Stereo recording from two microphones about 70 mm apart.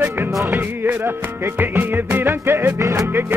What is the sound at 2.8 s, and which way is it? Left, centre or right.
Music, right.